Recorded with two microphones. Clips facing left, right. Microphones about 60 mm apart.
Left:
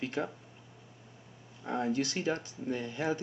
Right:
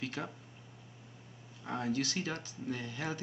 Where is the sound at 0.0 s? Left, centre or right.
Left.